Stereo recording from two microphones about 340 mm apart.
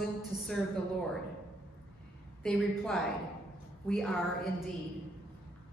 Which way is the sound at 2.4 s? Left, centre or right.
Centre.